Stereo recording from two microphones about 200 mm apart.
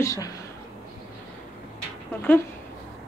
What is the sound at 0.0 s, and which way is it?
Speech, 15° left (ahead or behind).